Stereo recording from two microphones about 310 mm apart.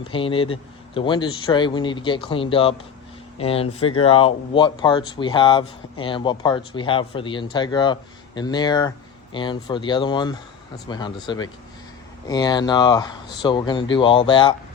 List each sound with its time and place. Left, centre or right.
0.0 s speech: centre
12.3 s speech: centre